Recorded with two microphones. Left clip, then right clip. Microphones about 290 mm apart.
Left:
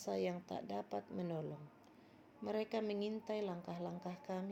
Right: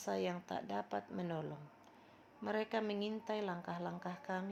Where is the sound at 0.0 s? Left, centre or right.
Right.